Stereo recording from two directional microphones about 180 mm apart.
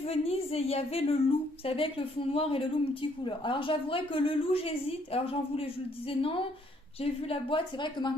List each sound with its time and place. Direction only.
0.0 s a woman's voice: 35° left (ahead or behind)